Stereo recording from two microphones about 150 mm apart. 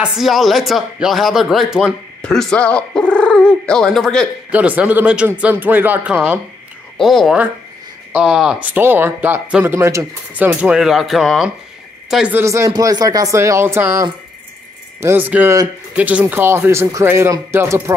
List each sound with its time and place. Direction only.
0.0 s speech: centre (ahead or behind)
4.5 s speech: 10° right (ahead or behind)
7.0 s speech: centre (ahead or behind)
12.4 s speech: 20° right (ahead or behind)